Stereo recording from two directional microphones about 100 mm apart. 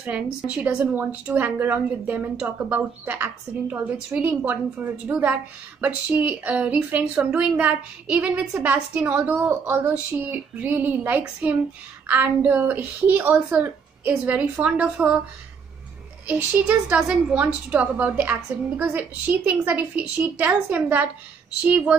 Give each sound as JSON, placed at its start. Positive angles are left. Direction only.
{"t": 0.0, "sound": "a woman's voice", "side_deg": -15}
{"t": 16.3, "sound": "a woman's voice", "side_deg": -15}